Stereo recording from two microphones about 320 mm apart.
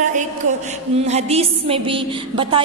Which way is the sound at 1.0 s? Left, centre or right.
Centre.